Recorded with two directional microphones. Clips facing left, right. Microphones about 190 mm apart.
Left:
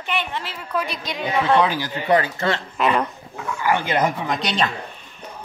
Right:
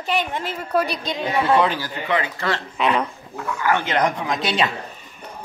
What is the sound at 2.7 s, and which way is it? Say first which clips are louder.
Speech: left 1 dB; centre (ahead or behind).